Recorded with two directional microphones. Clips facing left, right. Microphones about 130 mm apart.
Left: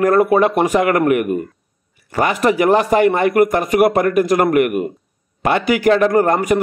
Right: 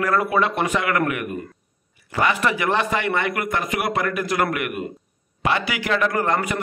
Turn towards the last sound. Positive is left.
turn(degrees=45)  # may be behind; listen again after turning